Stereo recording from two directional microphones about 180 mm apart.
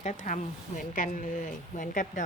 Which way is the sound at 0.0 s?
40° left (ahead or behind).